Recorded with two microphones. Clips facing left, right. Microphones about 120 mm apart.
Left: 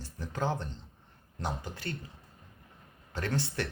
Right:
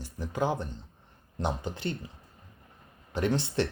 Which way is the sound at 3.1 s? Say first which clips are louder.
Right 5 dB; 15° right (ahead or behind).